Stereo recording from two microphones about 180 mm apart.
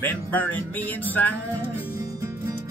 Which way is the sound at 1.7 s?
15° right (ahead or behind).